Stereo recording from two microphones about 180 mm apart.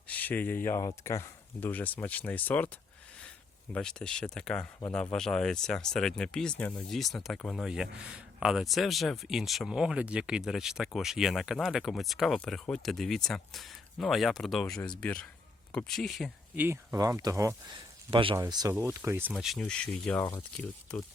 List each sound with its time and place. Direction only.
0.1 s speech: 10° left (ahead or behind)
3.7 s speech: 5° left (ahead or behind)
16.6 s speech: 15° right (ahead or behind)
18.1 s speech: 30° right (ahead or behind); by 19.3 s 10° right (ahead or behind)
19.3 s speech: centre (ahead or behind)